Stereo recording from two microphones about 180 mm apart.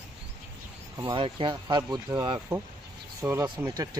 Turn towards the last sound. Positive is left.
turn(degrees=-20)  # may be behind; listen again after turning